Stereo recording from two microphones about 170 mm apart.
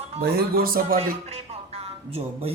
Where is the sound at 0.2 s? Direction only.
65° right (ahead or behind).